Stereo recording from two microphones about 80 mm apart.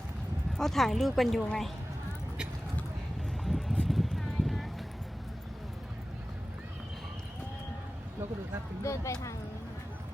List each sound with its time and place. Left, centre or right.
0.5 s speech: centre
3.4 s clip-clop: centre
8.8 s speech: left